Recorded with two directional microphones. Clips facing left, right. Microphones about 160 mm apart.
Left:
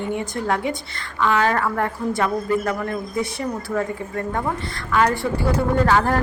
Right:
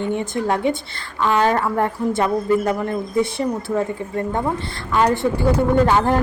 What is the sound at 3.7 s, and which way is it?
A woman's voice, 25° right (ahead or behind).